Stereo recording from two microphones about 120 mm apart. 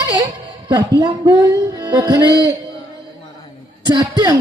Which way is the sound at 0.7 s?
35° right (ahead or behind).